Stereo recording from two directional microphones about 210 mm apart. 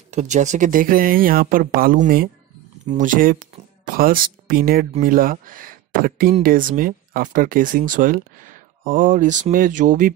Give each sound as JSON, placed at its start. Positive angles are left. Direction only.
{"t": 0.1, "sound": "speech", "side_deg": -35}